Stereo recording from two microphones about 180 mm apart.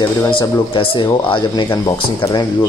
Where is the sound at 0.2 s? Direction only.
30° left (ahead or behind).